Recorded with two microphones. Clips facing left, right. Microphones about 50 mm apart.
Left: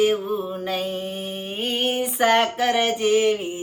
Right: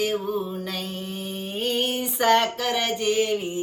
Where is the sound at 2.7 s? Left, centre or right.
Left.